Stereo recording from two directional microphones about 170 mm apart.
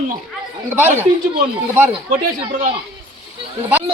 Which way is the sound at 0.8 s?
10° right (ahead or behind).